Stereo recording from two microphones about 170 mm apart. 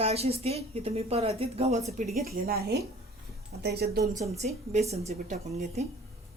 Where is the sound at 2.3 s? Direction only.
60° right (ahead or behind).